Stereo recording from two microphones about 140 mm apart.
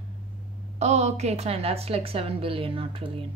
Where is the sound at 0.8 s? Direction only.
55° right (ahead or behind).